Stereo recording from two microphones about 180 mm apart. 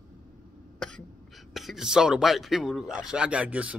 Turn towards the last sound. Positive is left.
turn(degrees=-5)  # may be behind; listen again after turning